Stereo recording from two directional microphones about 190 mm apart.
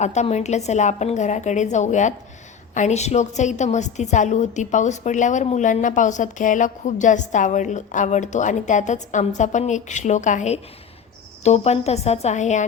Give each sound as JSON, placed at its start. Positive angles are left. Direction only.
{"t": 0.0, "sound": "a woman's voice", "side_deg": 35}